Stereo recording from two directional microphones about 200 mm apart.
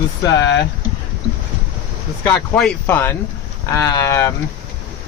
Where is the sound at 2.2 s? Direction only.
5° left (ahead or behind).